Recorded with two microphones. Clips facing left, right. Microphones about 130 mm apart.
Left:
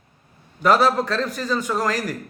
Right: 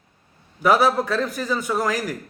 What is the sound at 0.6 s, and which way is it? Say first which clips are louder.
A man's voice: even; 5° right (ahead or behind).